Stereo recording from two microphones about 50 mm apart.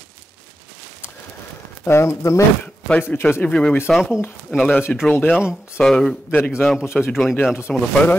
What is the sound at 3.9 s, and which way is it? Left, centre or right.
Speech, centre.